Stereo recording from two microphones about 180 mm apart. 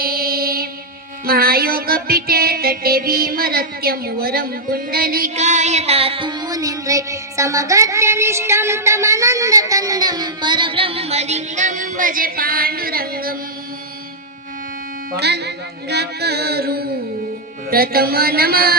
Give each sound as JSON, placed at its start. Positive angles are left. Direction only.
{"t": 0.0, "sound": "music", "side_deg": -55}
{"t": 5.3, "sound": "music", "side_deg": -40}
{"t": 15.1, "sound": "music", "side_deg": -65}